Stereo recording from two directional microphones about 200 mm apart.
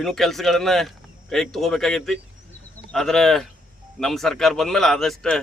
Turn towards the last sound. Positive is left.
turn(degrees=0)  # may be behind; listen again after turning